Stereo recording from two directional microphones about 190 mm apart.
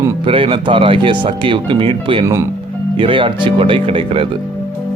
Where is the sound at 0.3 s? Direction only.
30° right (ahead or behind).